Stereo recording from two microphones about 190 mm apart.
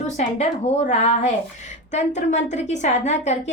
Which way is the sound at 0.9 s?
35° left (ahead or behind).